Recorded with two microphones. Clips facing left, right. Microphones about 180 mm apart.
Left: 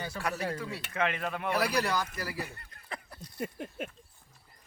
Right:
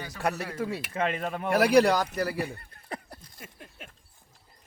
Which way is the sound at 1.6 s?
70° right (ahead or behind).